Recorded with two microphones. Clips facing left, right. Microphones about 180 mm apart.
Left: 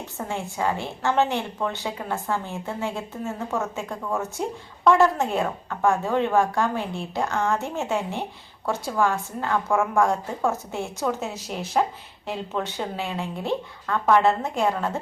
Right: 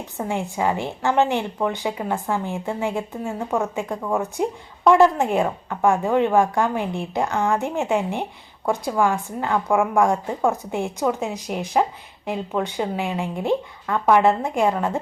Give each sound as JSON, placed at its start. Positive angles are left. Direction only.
{"t": 0.2, "sound": "a woman's voice", "side_deg": -15}